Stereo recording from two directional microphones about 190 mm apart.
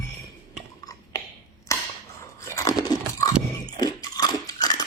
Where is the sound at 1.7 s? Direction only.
15° left (ahead or behind).